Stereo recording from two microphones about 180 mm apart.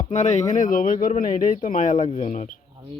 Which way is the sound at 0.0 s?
40° left (ahead or behind).